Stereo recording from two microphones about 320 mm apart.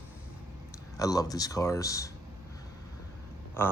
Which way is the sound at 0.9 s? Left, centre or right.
Centre.